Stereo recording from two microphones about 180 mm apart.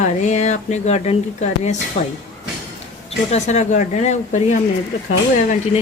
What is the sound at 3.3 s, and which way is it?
Speech, 40° left (ahead or behind).